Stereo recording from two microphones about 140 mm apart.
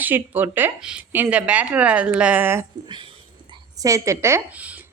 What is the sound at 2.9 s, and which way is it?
Speech, 35° right (ahead or behind).